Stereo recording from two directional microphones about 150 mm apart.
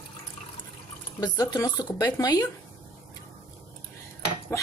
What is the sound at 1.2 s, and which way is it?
A woman's voice, 25° left (ahead or behind).